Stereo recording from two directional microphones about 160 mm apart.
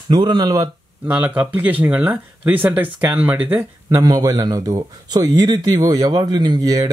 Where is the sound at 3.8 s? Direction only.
25° right (ahead or behind).